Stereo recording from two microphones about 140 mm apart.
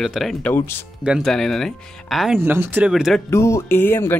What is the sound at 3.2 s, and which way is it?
Speech, 20° left (ahead or behind).